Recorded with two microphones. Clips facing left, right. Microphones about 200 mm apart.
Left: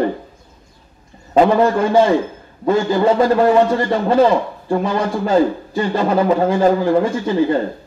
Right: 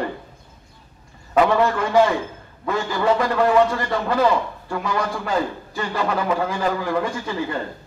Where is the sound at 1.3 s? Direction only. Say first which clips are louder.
Left 5 dB; 30° left (ahead or behind).